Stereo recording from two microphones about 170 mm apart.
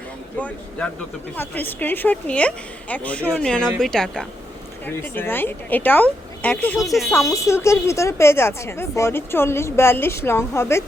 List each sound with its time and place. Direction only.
0.3 s a woman's voice: 10° left (ahead or behind)
7.1 s a woman's voice: 20° left (ahead or behind)